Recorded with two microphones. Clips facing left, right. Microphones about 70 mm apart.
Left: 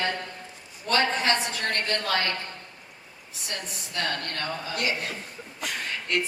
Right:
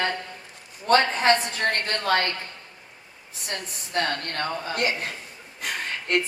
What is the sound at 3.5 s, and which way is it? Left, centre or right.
A woman's voice, right.